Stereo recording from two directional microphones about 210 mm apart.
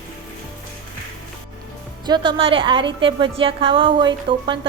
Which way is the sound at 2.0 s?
20° right (ahead or behind).